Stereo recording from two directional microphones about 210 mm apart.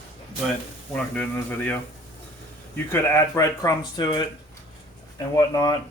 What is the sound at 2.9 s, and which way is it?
A woman's voice, 15° left (ahead or behind).